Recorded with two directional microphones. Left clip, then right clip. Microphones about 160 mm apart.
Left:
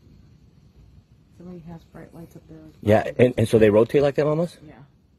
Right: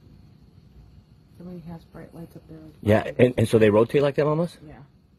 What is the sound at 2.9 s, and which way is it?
A man's voice, 35° left (ahead or behind).